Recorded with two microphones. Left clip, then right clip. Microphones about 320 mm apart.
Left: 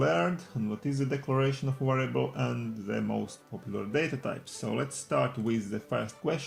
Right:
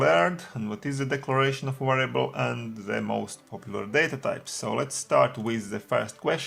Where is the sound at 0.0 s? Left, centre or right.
Right.